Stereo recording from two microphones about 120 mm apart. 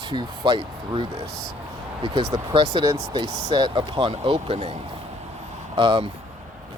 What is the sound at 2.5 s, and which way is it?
Speech, 40° right (ahead or behind).